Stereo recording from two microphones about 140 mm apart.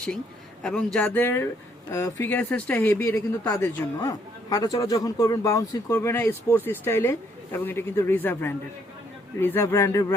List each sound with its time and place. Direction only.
0.6 s a man's voice: 5° left (ahead or behind); by 10.2 s 20° left (ahead or behind)